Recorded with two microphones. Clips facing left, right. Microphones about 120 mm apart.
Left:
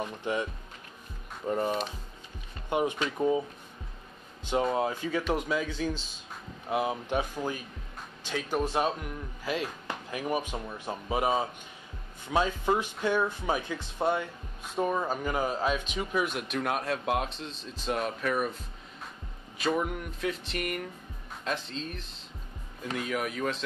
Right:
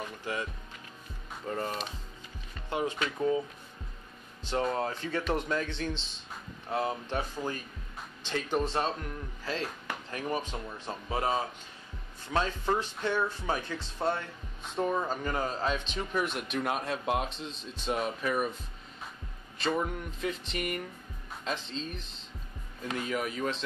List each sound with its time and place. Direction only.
0.0 s speech: 20° left (ahead or behind)
1.5 s speech: 15° left (ahead or behind)
4.6 s speech: 10° left (ahead or behind)
19.6 s a sound: 5° left (ahead or behind)